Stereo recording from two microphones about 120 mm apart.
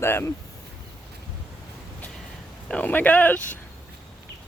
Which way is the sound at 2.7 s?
15° left (ahead or behind).